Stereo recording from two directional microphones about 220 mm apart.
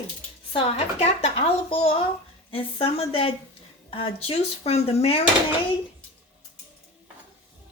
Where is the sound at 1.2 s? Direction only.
25° left (ahead or behind).